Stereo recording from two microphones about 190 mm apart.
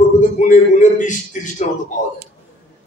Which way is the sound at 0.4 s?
40° left (ahead or behind).